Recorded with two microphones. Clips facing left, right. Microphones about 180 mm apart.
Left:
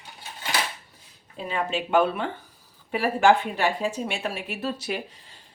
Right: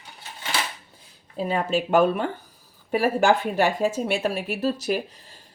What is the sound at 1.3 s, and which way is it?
Speech, 40° right (ahead or behind).